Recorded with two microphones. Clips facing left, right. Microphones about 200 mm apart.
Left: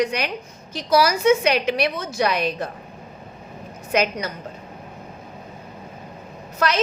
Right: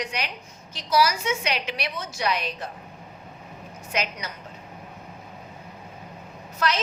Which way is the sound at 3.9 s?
55° left (ahead or behind).